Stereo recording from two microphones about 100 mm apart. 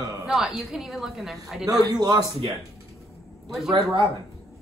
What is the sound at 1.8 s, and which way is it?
Speech, 40° right (ahead or behind).